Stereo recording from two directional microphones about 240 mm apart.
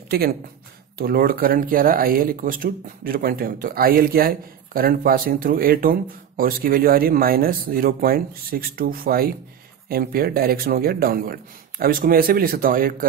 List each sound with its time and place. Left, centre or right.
0.1 s speech: right